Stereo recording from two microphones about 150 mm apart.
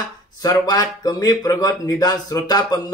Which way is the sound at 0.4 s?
25° left (ahead or behind).